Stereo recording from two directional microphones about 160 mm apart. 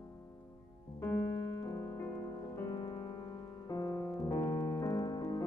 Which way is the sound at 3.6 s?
20° left (ahead or behind).